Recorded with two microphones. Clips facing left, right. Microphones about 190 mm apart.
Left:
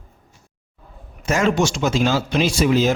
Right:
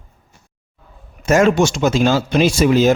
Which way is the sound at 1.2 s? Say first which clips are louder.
Right 5 dB; 50° right (ahead or behind).